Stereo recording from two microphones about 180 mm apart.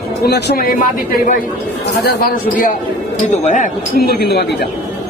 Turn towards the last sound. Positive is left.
turn(degrees=65)  # may be behind; listen again after turning